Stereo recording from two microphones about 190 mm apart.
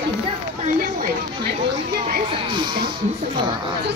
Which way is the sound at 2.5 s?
25° right (ahead or behind).